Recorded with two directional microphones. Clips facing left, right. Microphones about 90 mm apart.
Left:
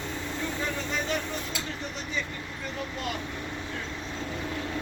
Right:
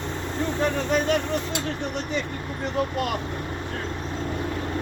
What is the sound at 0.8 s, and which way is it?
Speech, 65° right (ahead or behind).